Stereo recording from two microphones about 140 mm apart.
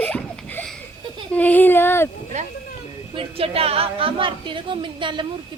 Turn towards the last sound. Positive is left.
turn(degrees=-35)  # may be behind; listen again after turning